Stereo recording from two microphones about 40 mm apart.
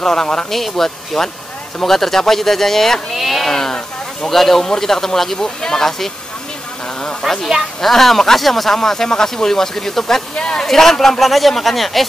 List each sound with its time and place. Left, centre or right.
0.0 s speech: centre
0.5 s speech: centre
3.5 s speech: centre
7.2 s speech: centre
10.3 s speech: left
10.6 s speech: centre